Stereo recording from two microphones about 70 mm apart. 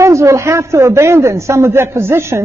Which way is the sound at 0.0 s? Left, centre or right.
Right.